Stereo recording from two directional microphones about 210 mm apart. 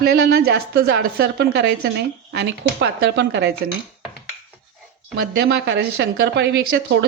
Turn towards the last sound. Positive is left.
turn(degrees=-55)  # may be behind; listen again after turning